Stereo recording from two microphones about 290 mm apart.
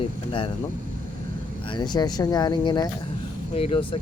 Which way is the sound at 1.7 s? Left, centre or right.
Centre.